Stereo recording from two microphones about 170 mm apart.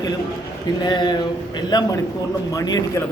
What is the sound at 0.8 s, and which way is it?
A man's voice, 25° left (ahead or behind).